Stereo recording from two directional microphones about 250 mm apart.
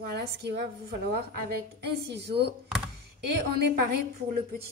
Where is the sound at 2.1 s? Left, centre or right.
Right.